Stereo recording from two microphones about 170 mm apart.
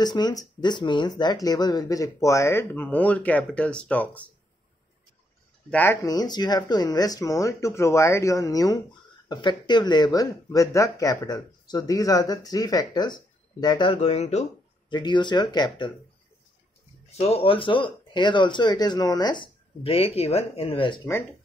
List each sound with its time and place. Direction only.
0.0 s speech: 25° left (ahead or behind); by 4.3 s 10° left (ahead or behind)
5.7 s speech: 10° left (ahead or behind)
6.0 s speech: 25° left (ahead or behind); by 14.5 s 40° left (ahead or behind)
14.9 s speech: 25° left (ahead or behind)
17.2 s speech: 35° left (ahead or behind)